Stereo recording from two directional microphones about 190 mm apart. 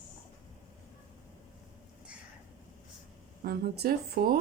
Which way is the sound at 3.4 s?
55° right (ahead or behind).